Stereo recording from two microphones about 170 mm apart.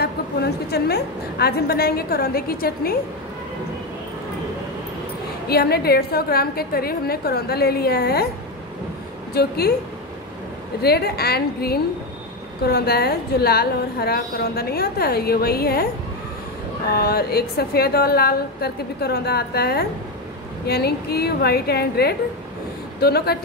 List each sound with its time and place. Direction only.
0.0 s a woman's voice: 70° left (ahead or behind)
5.5 s a woman's voice: 70° left (ahead or behind)
9.3 s a woman's voice: 70° left (ahead or behind)
10.8 s a woman's voice: 70° left (ahead or behind)
16.9 s a woman's voice: 65° left (ahead or behind)